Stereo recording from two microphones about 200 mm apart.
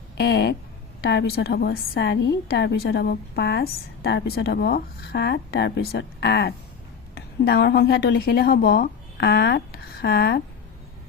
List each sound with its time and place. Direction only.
0.2 s a woman's voice: 55° left (ahead or behind)